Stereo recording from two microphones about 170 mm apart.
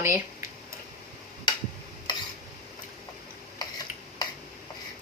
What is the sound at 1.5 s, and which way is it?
Tick-tock, 25° left (ahead or behind).